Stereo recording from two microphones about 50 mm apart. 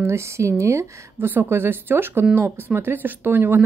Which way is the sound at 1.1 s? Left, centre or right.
Right.